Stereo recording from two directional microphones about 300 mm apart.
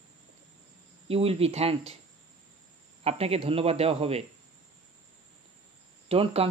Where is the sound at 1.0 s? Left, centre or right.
Centre.